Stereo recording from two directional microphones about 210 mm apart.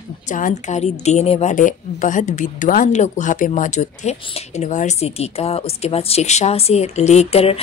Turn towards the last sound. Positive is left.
turn(degrees=30)  # may be behind; listen again after turning